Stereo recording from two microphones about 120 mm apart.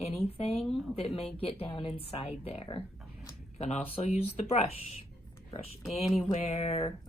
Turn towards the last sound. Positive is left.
turn(degrees=60)  # may be behind; listen again after turning